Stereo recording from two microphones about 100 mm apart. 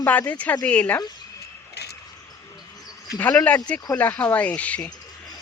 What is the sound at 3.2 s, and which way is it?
Speech, 15° left (ahead or behind).